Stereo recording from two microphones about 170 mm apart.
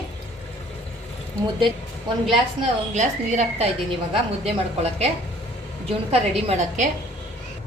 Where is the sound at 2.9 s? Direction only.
45° right (ahead or behind).